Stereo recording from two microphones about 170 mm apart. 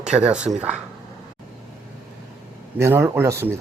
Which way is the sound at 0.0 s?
5° right (ahead or behind).